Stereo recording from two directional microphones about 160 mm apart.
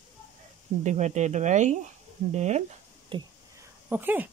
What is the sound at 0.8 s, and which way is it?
Speech, 45° right (ahead or behind).